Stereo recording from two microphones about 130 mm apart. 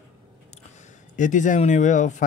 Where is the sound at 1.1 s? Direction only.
75° left (ahead or behind).